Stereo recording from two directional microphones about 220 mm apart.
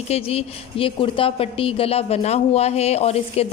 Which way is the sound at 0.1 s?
30° left (ahead or behind).